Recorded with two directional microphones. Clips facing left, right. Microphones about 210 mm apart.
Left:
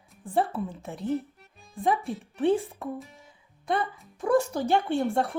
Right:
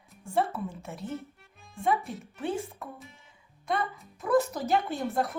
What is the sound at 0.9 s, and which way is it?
Music, centre (ahead or behind).